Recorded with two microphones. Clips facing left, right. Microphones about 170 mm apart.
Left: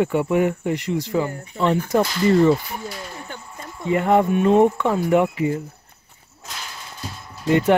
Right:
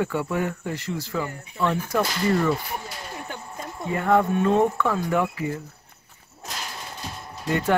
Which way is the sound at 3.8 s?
20° left (ahead or behind).